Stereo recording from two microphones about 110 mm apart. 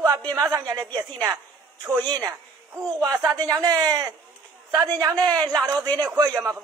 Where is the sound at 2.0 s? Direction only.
35° right (ahead or behind).